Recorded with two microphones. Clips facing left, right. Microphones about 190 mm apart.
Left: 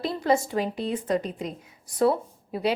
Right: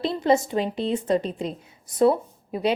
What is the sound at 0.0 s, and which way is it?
A woman's voice, 25° right (ahead or behind).